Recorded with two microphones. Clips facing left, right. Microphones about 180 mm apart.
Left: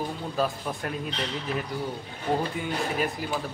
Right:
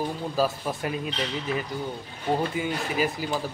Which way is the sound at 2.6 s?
5° right (ahead or behind).